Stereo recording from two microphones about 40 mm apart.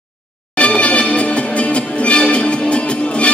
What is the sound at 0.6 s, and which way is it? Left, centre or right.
Music, left.